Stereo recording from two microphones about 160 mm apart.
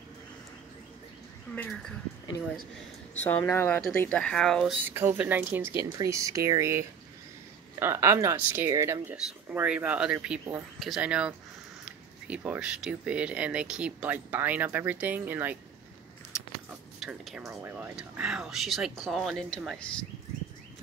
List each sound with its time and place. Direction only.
1.5 s speech: 5° left (ahead or behind)
3.3 s speech: 15° left (ahead or behind)
4.8 s speech: 15° right (ahead or behind)
17.0 s speech: centre (ahead or behind)
17.5 s speech: 15° right (ahead or behind); by 19.9 s 5° left (ahead or behind)